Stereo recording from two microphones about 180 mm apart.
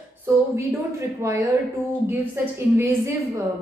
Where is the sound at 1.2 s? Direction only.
15° right (ahead or behind).